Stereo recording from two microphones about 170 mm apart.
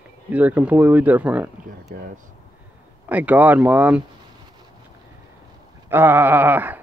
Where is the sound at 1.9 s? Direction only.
55° right (ahead or behind).